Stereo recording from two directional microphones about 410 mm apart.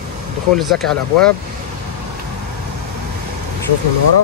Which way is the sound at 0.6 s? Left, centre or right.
Centre.